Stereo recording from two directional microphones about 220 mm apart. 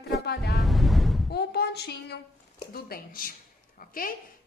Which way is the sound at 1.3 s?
45° left (ahead or behind).